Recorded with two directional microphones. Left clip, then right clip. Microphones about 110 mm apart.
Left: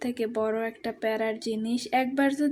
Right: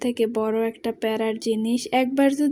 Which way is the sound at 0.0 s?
50° right (ahead or behind).